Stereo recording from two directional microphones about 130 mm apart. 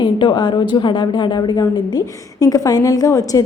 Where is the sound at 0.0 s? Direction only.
35° left (ahead or behind).